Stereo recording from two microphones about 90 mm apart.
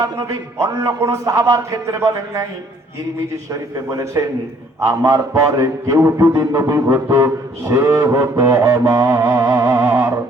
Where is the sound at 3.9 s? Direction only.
35° right (ahead or behind).